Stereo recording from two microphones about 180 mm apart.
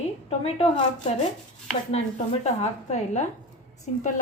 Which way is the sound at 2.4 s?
40° left (ahead or behind).